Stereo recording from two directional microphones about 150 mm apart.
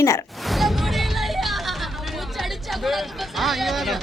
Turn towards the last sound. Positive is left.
turn(degrees=0)  # may be behind; listen again after turning